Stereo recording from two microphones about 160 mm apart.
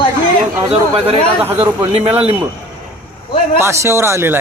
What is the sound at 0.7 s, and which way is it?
Speech, 35° right (ahead or behind).